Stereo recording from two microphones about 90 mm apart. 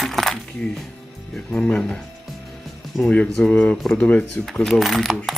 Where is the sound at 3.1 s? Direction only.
10° left (ahead or behind).